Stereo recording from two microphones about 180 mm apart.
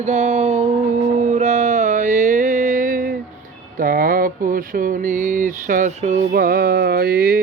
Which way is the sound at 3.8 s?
50° right (ahead or behind).